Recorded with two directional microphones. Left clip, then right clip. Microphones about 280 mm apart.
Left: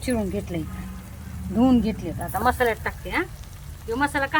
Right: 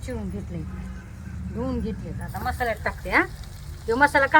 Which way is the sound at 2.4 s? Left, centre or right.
Centre.